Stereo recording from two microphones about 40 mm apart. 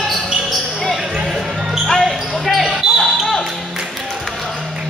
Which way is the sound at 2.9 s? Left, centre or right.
Centre.